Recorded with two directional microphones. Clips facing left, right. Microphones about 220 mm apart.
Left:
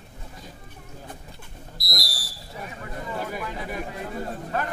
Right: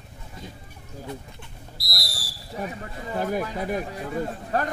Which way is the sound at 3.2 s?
45° right (ahead or behind).